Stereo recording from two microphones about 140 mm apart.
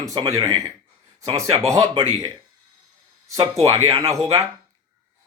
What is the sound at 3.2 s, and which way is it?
Speech, 25° right (ahead or behind).